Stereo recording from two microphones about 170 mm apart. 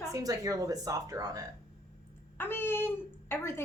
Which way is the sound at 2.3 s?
15° left (ahead or behind).